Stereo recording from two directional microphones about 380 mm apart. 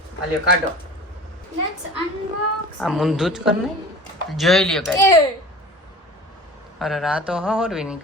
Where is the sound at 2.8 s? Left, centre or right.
Centre.